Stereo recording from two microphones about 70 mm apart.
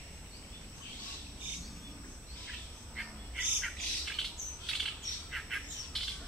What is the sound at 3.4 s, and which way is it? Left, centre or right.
Squawk, centre.